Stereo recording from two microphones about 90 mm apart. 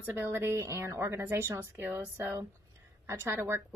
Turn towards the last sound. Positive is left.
turn(degrees=-30)  # may be behind; listen again after turning